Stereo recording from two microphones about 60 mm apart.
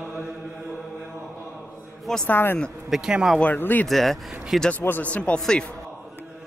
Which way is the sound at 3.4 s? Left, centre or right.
Left.